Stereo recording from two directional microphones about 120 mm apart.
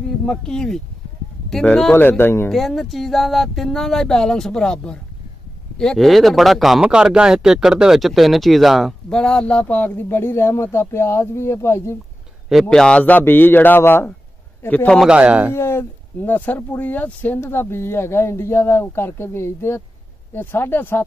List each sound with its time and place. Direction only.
0.2 s a man's voice: 5° left (ahead or behind)
2.5 s speech: centre (ahead or behind); by 12.0 s 20° left (ahead or behind)
12.4 s a man's voice: centre (ahead or behind)
15.0 s a man's voice: 10° right (ahead or behind)
15.5 s speech: 20° left (ahead or behind)